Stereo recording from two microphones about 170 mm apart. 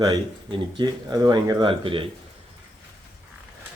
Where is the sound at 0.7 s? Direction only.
25° right (ahead or behind).